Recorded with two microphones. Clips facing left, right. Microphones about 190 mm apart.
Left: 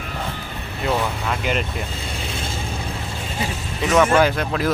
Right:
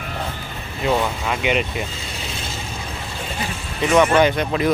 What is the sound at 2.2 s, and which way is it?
Vehicle, 50° left (ahead or behind).